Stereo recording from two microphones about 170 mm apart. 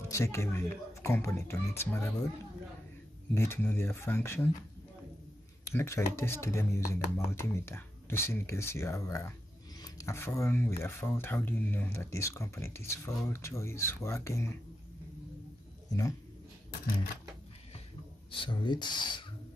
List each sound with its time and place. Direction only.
0.1 s speech: 15° left (ahead or behind)
3.3 s speech: 15° left (ahead or behind)
5.7 s speech: 15° left (ahead or behind)
15.9 s speech: 20° left (ahead or behind)
18.3 s speech: 30° left (ahead or behind)